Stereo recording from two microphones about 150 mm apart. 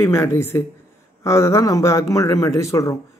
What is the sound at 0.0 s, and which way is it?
A man's voice, 15° left (ahead or behind).